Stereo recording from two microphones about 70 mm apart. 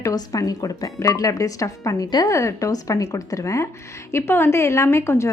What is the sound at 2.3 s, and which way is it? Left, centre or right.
A woman's voice, left.